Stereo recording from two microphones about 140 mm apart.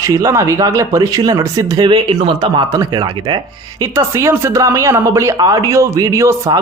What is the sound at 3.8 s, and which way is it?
Speech, 20° right (ahead or behind).